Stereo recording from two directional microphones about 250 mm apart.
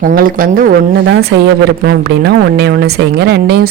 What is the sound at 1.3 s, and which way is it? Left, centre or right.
A man's voice, right.